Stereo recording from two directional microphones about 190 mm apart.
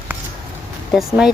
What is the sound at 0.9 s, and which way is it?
Speech, centre (ahead or behind).